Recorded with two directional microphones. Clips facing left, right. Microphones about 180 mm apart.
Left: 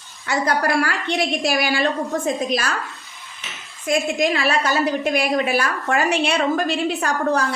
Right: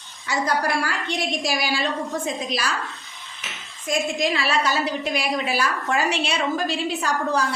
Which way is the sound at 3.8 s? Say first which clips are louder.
Left 4 dB; 60° left (ahead or behind).